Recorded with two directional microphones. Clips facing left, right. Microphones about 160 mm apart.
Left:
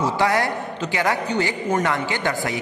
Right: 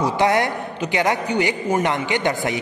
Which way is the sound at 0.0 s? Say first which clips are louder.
Right 2 dB; 20° right (ahead or behind).